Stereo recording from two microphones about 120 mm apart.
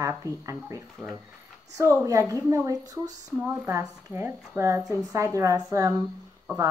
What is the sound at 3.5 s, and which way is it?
Speech, 20° right (ahead or behind).